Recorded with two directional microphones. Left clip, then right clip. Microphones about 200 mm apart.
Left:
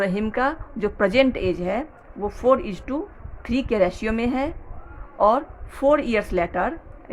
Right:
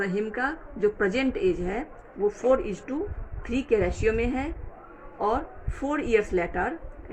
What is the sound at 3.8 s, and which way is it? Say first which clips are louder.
Speech: left 3 dB; 65° left (ahead or behind).